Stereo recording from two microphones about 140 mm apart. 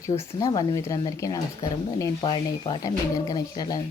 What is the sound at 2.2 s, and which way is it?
A woman's voice, 35° left (ahead or behind).